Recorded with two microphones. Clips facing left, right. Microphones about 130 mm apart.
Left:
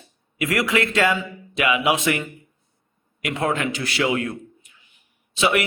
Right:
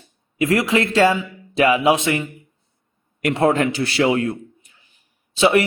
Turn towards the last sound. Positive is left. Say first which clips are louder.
# right 5 dB
turn(degrees=-30)  # may be behind; listen again after turning